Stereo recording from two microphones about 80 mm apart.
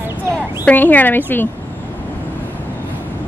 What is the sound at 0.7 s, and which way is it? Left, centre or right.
Speech, left.